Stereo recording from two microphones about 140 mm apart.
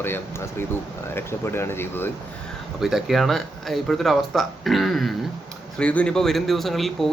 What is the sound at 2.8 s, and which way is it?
Speech, centre (ahead or behind).